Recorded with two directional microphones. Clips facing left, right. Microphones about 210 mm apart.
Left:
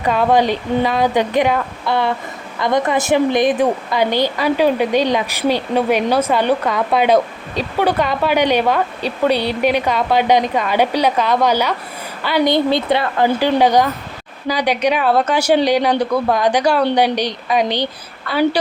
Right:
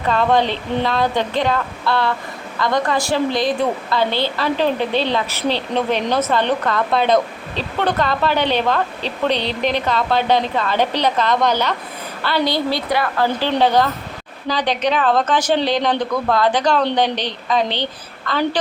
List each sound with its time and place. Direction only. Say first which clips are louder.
0.0 s a woman's voice: left 2 dB; 10° left (ahead or behind)
13.2 s a woman's voice: left 4 dB; 10° left (ahead or behind)